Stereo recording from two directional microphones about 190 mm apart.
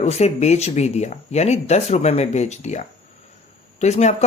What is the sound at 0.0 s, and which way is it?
Speech, 35° left (ahead or behind).